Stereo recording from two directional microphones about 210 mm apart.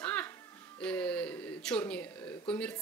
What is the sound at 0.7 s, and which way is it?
Speech, 5° left (ahead or behind).